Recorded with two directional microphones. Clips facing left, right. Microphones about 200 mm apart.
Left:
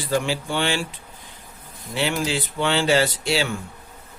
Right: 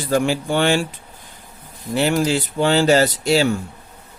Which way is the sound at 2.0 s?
45° right (ahead or behind).